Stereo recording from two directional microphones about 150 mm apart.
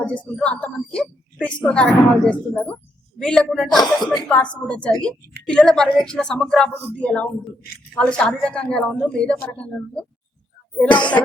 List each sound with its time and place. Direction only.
0.0 s a woman's voice: 10° left (ahead or behind)
3.8 s speech: 25° left (ahead or behind)
4.3 s a woman's voice: 5° left (ahead or behind)
10.9 s speech: 30° left (ahead or behind)